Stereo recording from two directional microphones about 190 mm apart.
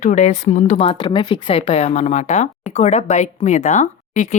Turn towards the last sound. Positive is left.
turn(degrees=40)  # may be behind; listen again after turning